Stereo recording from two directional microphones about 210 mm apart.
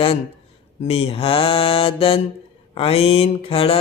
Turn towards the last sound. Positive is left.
turn(degrees=25)  # may be behind; listen again after turning